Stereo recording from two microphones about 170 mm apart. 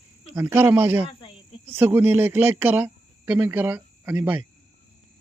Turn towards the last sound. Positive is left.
turn(degrees=-10)  # may be behind; listen again after turning